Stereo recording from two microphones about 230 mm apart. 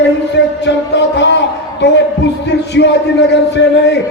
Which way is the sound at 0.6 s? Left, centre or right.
Left.